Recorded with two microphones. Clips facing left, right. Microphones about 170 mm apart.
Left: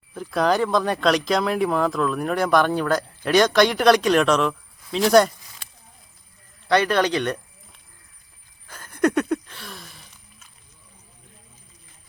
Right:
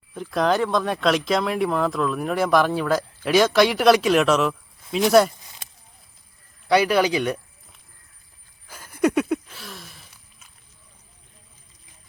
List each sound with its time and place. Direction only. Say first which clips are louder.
0.1 s speech: even; centre (ahead or behind)
6.7 s speech: right 1 dB; 10° right (ahead or behind)
8.6 s a sound: even; 10° right (ahead or behind)